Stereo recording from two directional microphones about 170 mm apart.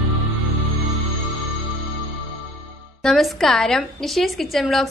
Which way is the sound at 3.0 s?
Centre (ahead or behind).